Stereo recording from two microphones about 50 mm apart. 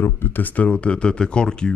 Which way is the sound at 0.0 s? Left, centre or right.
Left.